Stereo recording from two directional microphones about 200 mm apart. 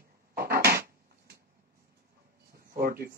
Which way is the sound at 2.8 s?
45° right (ahead or behind).